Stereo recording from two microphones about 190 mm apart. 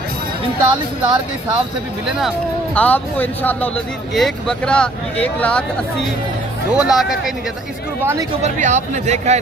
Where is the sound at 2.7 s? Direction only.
10° left (ahead or behind).